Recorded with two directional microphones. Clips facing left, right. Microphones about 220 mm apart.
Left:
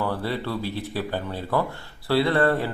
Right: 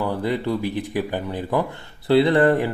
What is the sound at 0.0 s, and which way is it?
Speech, 15° right (ahead or behind).